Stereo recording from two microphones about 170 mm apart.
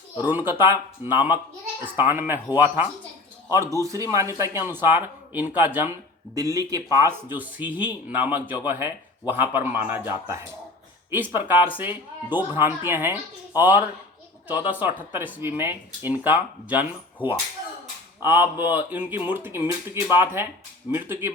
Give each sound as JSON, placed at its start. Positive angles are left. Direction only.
{"t": 0.2, "sound": "a man's voice", "side_deg": -10}
{"t": 14.7, "sound": "speech", "side_deg": -10}